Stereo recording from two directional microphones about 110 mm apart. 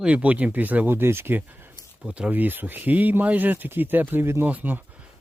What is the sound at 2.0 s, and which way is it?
Speech, 10° right (ahead or behind).